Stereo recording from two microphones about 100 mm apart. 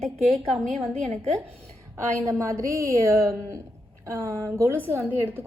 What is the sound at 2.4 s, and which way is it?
A woman's voice, 30° right (ahead or behind).